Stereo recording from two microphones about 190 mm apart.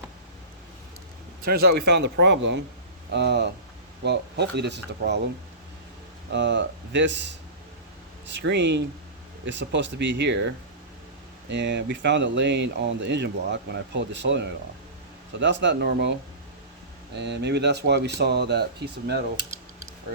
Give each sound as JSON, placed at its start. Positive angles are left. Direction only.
{"t": 1.5, "sound": "speech", "side_deg": -55}
{"t": 6.3, "sound": "speech", "side_deg": -65}
{"t": 17.2, "sound": "speech", "side_deg": -65}